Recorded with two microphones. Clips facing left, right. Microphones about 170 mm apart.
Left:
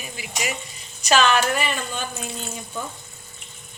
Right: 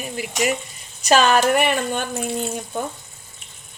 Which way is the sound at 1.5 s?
60° right (ahead or behind).